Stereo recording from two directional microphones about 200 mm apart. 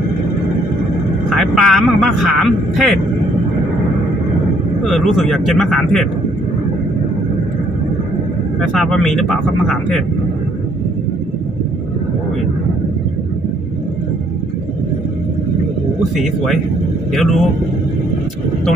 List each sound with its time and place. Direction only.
1.4 s speech: centre (ahead or behind)
4.8 s speech: centre (ahead or behind)
8.5 s speech: centre (ahead or behind)
17.1 s speech: centre (ahead or behind)